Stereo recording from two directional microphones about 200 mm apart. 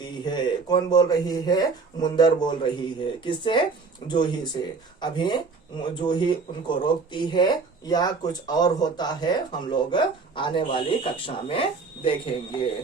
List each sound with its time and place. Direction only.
0.3 s speech: 20° left (ahead or behind)